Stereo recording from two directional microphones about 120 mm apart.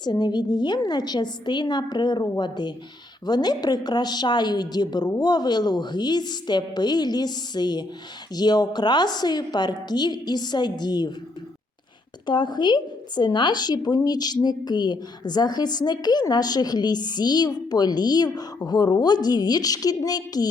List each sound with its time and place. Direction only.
0.0 s speech: 35° left (ahead or behind)
12.2 s speech: 40° left (ahead or behind)